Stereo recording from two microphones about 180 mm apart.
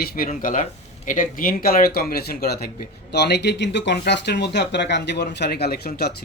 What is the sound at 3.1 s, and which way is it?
A man's voice, 70° left (ahead or behind).